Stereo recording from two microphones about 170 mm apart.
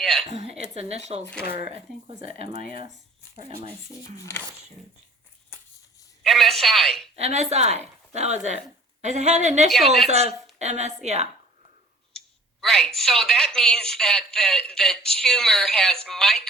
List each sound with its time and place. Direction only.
0.0 s a sound: centre (ahead or behind)
0.3 s a sound: 40° right (ahead or behind)
0.8 s speech: 40° right (ahead or behind)
1.2 s speech: 5° left (ahead or behind)
1.5 s speech: 65° left (ahead or behind)
2.9 s speech: 35° right (ahead or behind)
4.2 s speech: 20° left (ahead or behind)
6.2 s a woman's voice: centre (ahead or behind)
7.2 s speech: 40° right (ahead or behind)
9.6 s a woman's voice: centre (ahead or behind)
10.1 s speech: 40° right (ahead or behind)
12.1 s a woman's voice: 5° left (ahead or behind)